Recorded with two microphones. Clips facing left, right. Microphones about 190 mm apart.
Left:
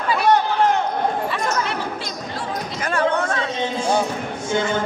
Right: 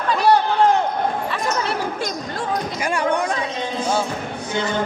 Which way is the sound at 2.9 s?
15° right (ahead or behind).